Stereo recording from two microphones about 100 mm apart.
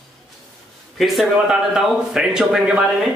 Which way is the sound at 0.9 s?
Centre (ahead or behind).